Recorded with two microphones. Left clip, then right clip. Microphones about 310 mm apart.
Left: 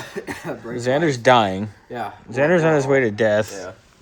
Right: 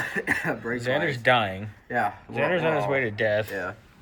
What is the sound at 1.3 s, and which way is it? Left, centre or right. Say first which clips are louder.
Speech: left 7 dB; left.